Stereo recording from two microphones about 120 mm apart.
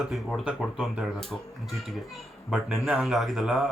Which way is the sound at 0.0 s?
Centre (ahead or behind).